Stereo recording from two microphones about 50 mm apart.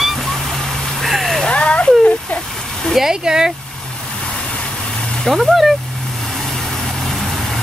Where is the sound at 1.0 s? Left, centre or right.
Centre.